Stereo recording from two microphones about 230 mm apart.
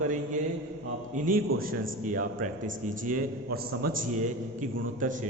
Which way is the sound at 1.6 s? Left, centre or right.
Right.